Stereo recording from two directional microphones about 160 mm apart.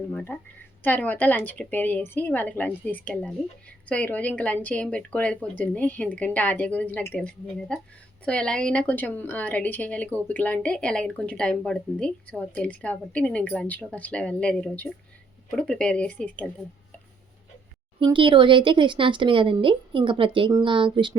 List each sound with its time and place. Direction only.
0.3 s speech: 10° left (ahead or behind)
18.0 s speech: 30° right (ahead or behind)